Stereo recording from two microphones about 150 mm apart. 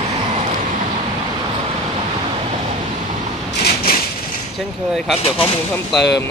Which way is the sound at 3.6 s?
90° left.